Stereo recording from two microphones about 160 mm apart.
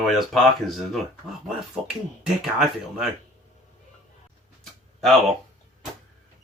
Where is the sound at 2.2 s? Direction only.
5° right (ahead or behind).